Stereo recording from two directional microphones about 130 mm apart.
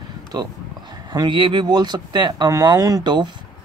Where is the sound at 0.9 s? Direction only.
35° right (ahead or behind).